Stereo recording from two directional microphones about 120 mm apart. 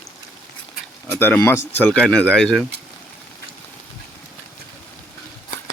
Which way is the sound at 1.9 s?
5° left (ahead or behind).